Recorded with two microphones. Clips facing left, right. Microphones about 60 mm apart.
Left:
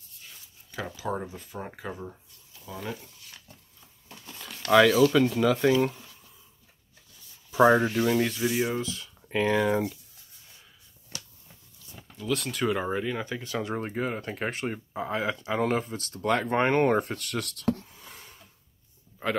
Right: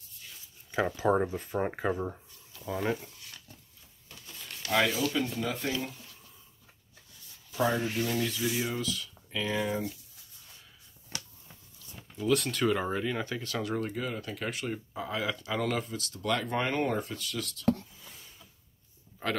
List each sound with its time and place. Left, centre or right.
0.7 s speech: right
4.3 s speech: left
7.5 s speech: left
8.3 s speech: left
8.5 s speech: left
9.3 s speech: left
12.2 s speech: centre; by 18.4 s left